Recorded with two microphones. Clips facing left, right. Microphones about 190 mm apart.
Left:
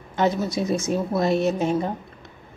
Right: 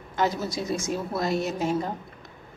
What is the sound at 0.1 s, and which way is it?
A woman's voice, 20° left (ahead or behind).